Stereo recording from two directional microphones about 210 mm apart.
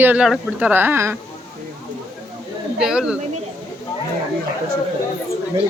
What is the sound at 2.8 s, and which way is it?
Speech, 5° right (ahead or behind).